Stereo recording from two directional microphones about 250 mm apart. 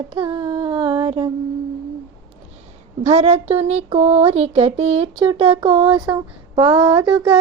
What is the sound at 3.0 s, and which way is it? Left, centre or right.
Speech, right.